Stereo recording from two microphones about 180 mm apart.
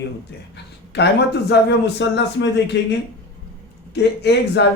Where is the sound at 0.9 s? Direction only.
70° left (ahead or behind).